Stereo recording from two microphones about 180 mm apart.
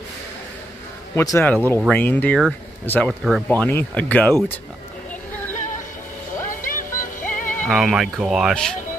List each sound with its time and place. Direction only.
1.1 s speech: 15° left (ahead or behind)
6.5 s music: 50° left (ahead or behind)
7.6 s speech: centre (ahead or behind)